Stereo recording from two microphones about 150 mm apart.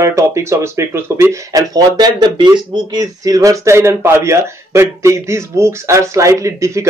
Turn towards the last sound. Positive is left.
turn(degrees=-20)  # may be behind; listen again after turning